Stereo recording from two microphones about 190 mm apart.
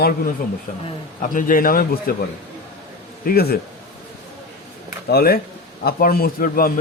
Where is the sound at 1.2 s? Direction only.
45° left (ahead or behind).